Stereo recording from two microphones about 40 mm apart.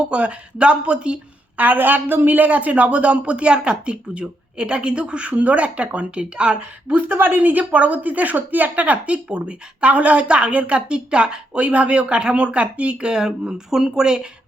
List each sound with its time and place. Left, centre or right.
0.0 s speech: right
1.5 s a woman's voice: right
7.6 s speech: right; by 14.3 s centre